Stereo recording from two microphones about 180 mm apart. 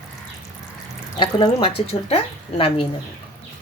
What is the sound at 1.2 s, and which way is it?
Speech, 30° left (ahead or behind).